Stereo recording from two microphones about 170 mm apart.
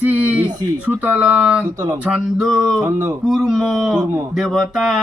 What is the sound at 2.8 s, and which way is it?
Speech, 15° right (ahead or behind).